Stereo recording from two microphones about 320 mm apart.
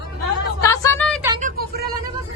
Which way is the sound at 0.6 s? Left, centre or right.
Centre.